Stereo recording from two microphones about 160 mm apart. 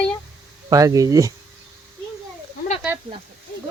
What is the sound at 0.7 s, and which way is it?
Speech, 20° right (ahead or behind).